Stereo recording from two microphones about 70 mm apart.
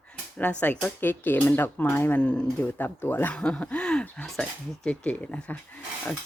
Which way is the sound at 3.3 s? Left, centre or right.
Centre.